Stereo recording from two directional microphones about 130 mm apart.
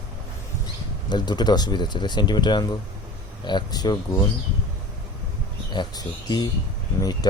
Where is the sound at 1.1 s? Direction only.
35° left (ahead or behind).